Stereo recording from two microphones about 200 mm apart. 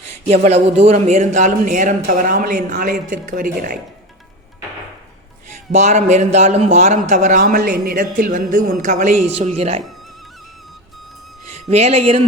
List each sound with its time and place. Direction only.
0.1 s a man's voice: 35° right (ahead or behind)
5.5 s a man's voice: 35° right (ahead or behind)
11.7 s a man's voice: 30° right (ahead or behind)